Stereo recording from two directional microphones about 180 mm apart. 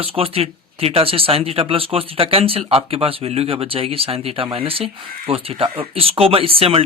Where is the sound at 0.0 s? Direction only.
30° right (ahead or behind).